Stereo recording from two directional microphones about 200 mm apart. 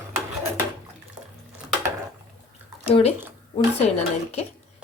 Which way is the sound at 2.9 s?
30° left (ahead or behind).